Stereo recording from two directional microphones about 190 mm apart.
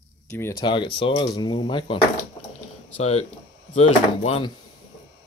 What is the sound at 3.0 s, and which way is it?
Speech, 35° left (ahead or behind).